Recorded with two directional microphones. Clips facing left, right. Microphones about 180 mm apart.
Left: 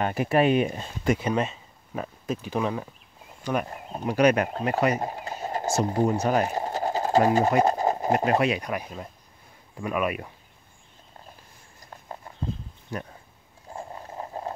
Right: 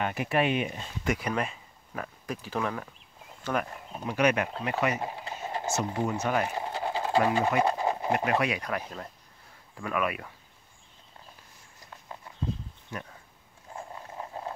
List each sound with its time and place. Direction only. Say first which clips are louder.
0.0 s speech: left 5 dB; 40° left (ahead or behind)
1.1 s speech: left 5 dB; 25° left (ahead or behind)
3.6 s speech: left 6 dB; 40° left (ahead or behind); by 10.3 s 20° left (ahead or behind)
12.9 s speech: left 5 dB; 35° left (ahead or behind)
13.7 s a sound: left 3 dB; 35° left (ahead or behind)